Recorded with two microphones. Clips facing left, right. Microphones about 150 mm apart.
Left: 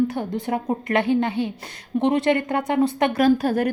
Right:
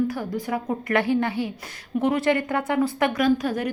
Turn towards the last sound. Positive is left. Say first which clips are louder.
# left 3 dB
turn(degrees=30)  # may be behind; listen again after turning